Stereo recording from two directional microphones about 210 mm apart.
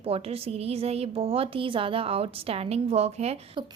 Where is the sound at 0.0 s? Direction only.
30° right (ahead or behind).